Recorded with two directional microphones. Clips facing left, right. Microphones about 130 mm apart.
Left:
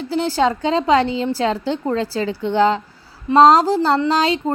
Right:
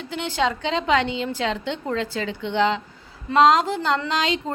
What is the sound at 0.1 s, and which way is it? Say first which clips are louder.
Speech: left 6 dB; 35° left (ahead or behind).